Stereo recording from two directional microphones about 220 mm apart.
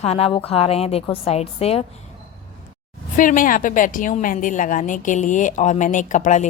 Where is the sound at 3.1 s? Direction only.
35° left (ahead or behind).